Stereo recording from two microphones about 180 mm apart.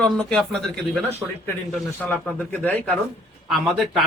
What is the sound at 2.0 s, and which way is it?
Speech, 10° left (ahead or behind).